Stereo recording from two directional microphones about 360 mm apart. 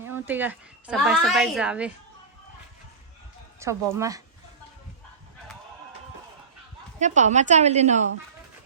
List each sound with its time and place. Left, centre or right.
0.0 s a woman's voice: centre
3.6 s speech: centre
7.0 s a woman's voice: centre